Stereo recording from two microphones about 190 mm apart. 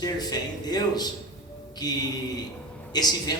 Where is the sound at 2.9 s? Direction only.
20° left (ahead or behind).